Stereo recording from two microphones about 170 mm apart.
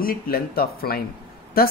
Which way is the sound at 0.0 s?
60° left (ahead or behind).